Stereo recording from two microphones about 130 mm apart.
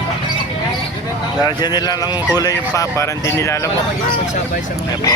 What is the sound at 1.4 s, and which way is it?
Chicken, 30° left (ahead or behind).